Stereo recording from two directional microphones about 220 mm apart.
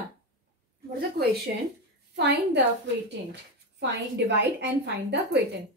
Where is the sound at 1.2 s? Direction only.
50° right (ahead or behind).